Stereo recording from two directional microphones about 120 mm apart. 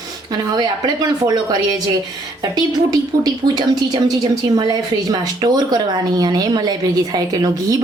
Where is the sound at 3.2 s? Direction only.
35° right (ahead or behind).